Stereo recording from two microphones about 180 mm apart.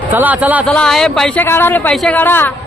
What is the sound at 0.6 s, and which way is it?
Speech, 5° left (ahead or behind).